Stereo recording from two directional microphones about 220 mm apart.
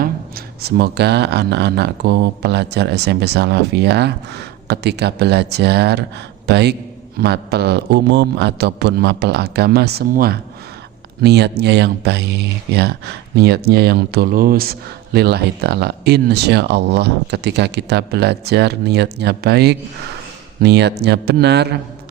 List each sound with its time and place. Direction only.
0.0 s speech: 45° right (ahead or behind)